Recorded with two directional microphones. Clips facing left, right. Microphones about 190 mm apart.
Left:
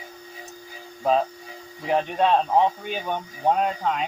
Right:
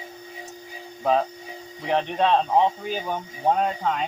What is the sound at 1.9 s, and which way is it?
Speech, 5° left (ahead or behind).